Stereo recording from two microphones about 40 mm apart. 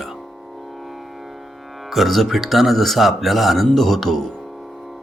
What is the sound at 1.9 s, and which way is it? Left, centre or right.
Speech, centre.